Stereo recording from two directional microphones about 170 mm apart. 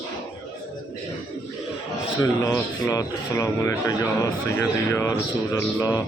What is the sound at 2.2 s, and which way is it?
Speech, 20° left (ahead or behind).